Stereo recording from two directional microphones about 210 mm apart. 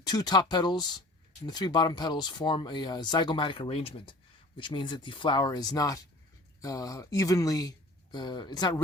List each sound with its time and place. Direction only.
0.0 s speech: 20° left (ahead or behind)